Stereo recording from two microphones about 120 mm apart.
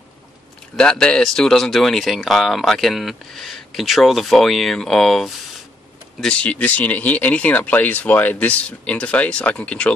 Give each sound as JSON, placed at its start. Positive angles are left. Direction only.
{"t": 0.7, "sound": "speech", "side_deg": 5}